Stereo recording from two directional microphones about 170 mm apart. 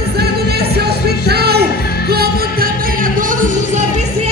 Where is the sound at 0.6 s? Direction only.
70° right (ahead or behind); by 3.8 s 50° right (ahead or behind).